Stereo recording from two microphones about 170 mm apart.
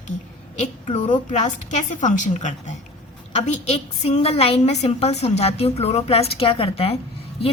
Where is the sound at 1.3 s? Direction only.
45° left (ahead or behind).